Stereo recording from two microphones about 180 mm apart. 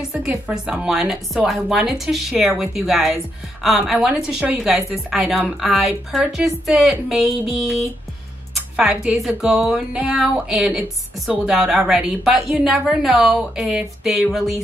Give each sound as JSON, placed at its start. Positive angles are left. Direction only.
{"t": 0.1, "sound": "a woman's voice", "side_deg": -5}
{"t": 8.7, "sound": "a woman's voice", "side_deg": -5}